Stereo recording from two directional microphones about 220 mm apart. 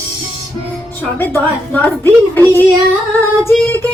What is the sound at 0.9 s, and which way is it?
A woman's voice, 10° left (ahead or behind).